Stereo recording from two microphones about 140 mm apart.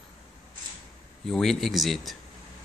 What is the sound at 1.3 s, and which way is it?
Speech, 5° left (ahead or behind).